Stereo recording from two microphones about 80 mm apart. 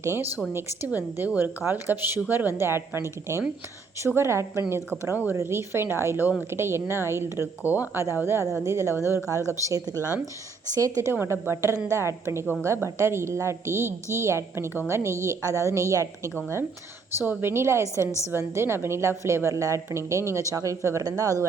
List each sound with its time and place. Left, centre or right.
0.0 s a woman's voice: right
5.0 s a woman's voice: right
9.9 s speech: left
10.7 s speech: right
11.1 s a woman's voice: right